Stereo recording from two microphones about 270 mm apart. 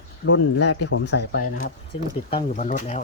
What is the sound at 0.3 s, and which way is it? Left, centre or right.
Speech, left.